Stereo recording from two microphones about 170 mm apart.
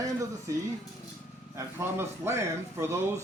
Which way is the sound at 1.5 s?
15° right (ahead or behind).